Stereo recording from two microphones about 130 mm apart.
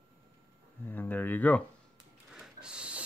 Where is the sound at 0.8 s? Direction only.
15° left (ahead or behind).